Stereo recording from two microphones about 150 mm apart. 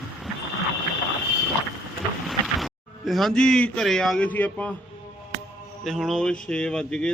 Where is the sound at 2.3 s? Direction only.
Centre (ahead or behind).